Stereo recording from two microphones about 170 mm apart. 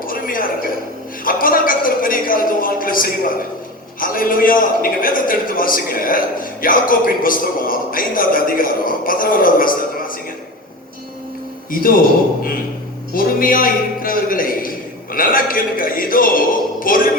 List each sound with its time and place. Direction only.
0.0 s a sound: 55° left (ahead or behind)
1.2 s a man's voice: 55° left (ahead or behind)
11.7 s a man's voice: 55° left (ahead or behind)